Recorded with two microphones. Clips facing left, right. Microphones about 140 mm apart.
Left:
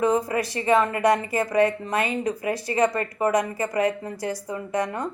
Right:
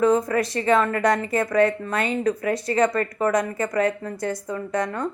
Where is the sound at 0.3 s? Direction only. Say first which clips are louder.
Right 1 dB; 20° left (ahead or behind).